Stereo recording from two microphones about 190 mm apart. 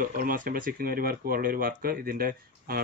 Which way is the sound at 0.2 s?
45° right (ahead or behind).